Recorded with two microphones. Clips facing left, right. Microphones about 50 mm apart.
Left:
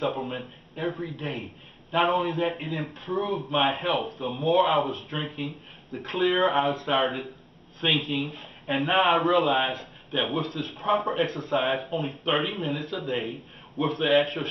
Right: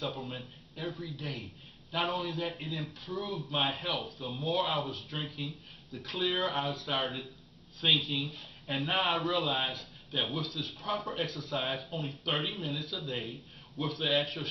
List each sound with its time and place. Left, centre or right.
0.0 s speech: left